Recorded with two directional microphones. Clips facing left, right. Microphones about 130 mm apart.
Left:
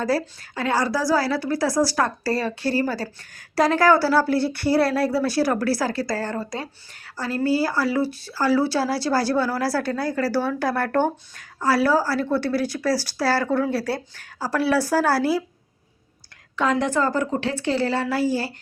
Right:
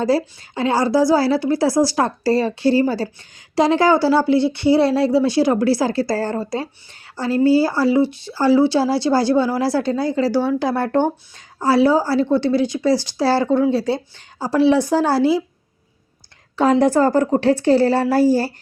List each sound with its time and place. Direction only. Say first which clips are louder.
0.0 s a woman's voice: right 5 dB; 25° right (ahead or behind)
16.6 s a woman's voice: right 7 dB; 35° right (ahead or behind)